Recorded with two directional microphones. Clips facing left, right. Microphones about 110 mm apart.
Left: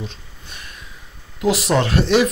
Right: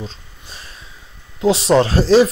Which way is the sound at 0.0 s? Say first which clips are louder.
Right 1 dB; 30° right (ahead or behind).